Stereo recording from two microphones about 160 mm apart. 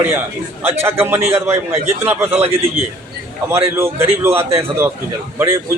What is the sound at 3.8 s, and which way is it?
Speech, 15° right (ahead or behind).